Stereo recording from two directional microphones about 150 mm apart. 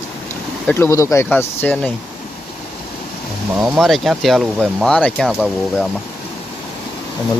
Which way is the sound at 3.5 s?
Centre (ahead or behind).